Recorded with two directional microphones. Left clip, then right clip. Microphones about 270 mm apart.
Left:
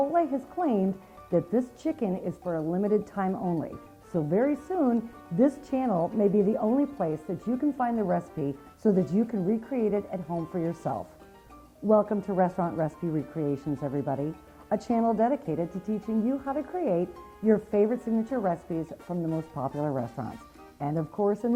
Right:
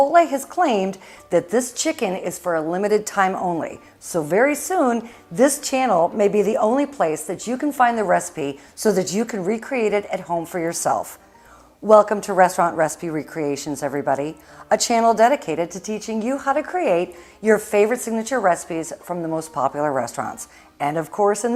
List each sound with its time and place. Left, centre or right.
0.1 s a woman's voice: centre
5.4 s a woman's voice: centre